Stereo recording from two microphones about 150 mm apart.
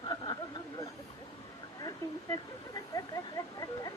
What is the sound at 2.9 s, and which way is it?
Speech, 25° left (ahead or behind).